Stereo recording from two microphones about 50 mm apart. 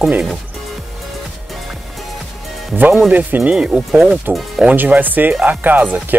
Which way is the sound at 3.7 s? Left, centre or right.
Centre.